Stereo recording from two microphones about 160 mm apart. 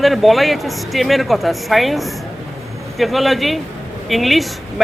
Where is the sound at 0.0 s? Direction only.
Centre (ahead or behind).